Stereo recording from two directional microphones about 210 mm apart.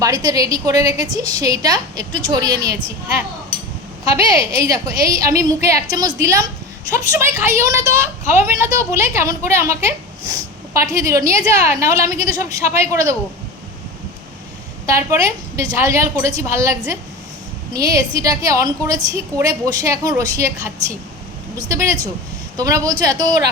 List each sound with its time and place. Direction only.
0.0 s a woman's voice: 15° right (ahead or behind)
4.5 s a woman's voice: 15° right (ahead or behind)
10.8 s a woman's voice: 15° right (ahead or behind)
14.8 s a woman's voice: 15° right (ahead or behind)